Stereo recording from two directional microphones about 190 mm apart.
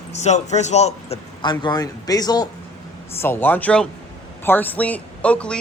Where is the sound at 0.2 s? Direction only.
35° left (ahead or behind).